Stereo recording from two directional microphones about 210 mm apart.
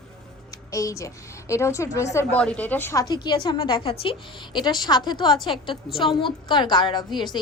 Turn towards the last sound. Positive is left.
turn(degrees=20)  # may be behind; listen again after turning